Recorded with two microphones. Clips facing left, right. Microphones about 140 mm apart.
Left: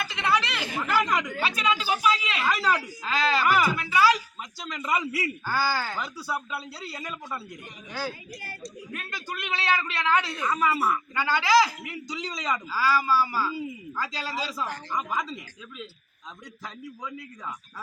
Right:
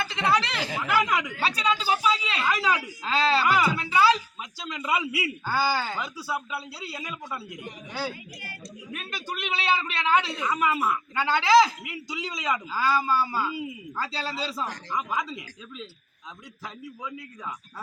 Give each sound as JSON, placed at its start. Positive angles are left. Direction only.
{"t": 0.0, "sound": "chatter", "side_deg": -30}
{"t": 0.8, "sound": "chatter", "side_deg": -5}
{"t": 1.9, "sound": "speech", "side_deg": -30}
{"t": 2.4, "sound": "a man's voice", "side_deg": 0}
{"t": 3.0, "sound": "a man's voice", "side_deg": -30}
{"t": 3.4, "sound": "a man's voice", "side_deg": 0}
{"t": 3.8, "sound": "a sound", "side_deg": -25}
{"t": 4.6, "sound": "a man's voice", "side_deg": -5}
{"t": 6.0, "sound": "a man's voice", "side_deg": -5}
{"t": 8.9, "sound": "a man's voice", "side_deg": -20}
{"t": 10.4, "sound": "a man's voice", "side_deg": -5}
{"t": 11.9, "sound": "a man's voice", "side_deg": -5}
{"t": 12.7, "sound": "a man's voice", "side_deg": -25}
{"t": 14.9, "sound": "a man's voice", "side_deg": -5}